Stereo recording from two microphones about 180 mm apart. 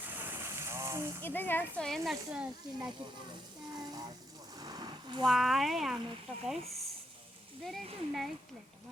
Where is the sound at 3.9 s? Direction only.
20° right (ahead or behind).